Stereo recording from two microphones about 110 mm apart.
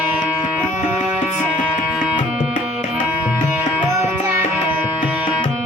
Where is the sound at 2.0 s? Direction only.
10° right (ahead or behind).